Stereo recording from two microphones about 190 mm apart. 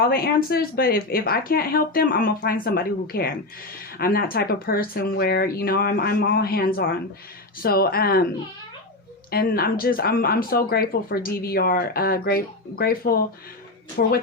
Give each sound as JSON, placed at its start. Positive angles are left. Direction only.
{"t": 0.1, "sound": "speech", "side_deg": 55}
{"t": 9.3, "sound": "a woman's voice", "side_deg": 50}